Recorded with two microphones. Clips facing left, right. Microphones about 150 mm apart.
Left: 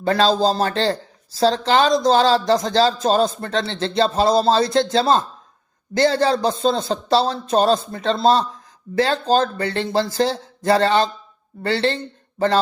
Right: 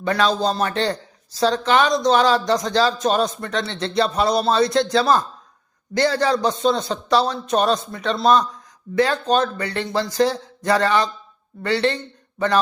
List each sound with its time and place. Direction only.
0.0 s a man's voice: 30° left (ahead or behind)